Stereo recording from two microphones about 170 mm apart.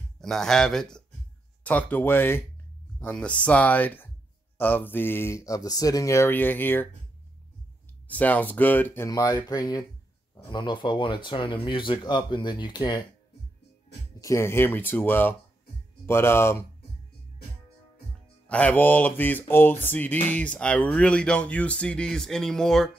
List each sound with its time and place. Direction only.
0.2 s speech: 5° left (ahead or behind)
1.6 s music: 10° left (ahead or behind)
8.1 s music: 10° left (ahead or behind)
10.3 s speech: 25° left (ahead or behind)
14.2 s music: 15° left (ahead or behind)
18.5 s music: 10° left (ahead or behind)